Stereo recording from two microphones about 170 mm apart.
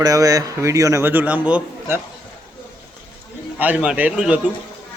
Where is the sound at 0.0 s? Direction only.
20° right (ahead or behind).